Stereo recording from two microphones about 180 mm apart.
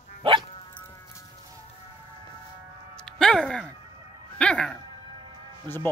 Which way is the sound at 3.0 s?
5° left (ahead or behind).